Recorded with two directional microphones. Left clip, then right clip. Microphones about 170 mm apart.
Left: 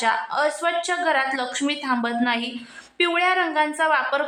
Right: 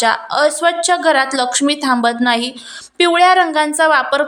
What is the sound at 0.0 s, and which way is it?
A woman's voice, 25° right (ahead or behind).